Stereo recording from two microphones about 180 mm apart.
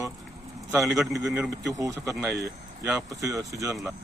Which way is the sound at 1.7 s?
20° right (ahead or behind).